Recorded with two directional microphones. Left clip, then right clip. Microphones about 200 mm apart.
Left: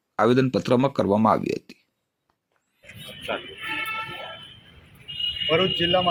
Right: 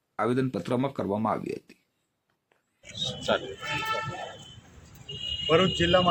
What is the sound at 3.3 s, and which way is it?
Speech, 65° right (ahead or behind).